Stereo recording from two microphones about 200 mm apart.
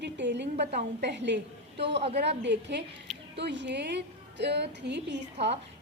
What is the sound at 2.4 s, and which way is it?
A woman's voice, 60° right (ahead or behind).